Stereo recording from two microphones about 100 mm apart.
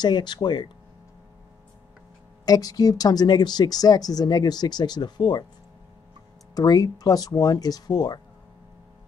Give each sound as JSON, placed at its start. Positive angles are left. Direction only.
{"t": 0.0, "sound": "speech", "side_deg": 45}
{"t": 2.4, "sound": "speech", "side_deg": 40}
{"t": 6.5, "sound": "speech", "side_deg": 40}